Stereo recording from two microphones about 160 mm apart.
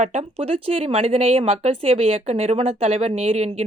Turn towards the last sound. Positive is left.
turn(degrees=-40)  # may be behind; listen again after turning